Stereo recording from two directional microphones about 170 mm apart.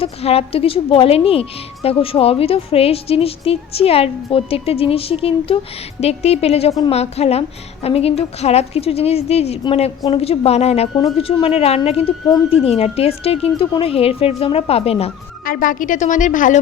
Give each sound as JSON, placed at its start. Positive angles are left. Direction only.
{"t": 0.0, "sound": "a woman's voice", "side_deg": 35}
{"t": 15.4, "sound": "a woman's voice", "side_deg": 55}